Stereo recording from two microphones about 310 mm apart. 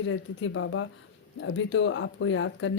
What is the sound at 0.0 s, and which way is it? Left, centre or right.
Speech, left.